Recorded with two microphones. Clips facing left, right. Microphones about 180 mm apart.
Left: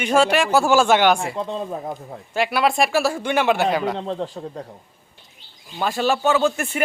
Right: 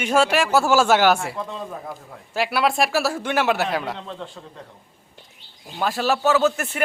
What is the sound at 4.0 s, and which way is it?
Speech, 35° left (ahead or behind).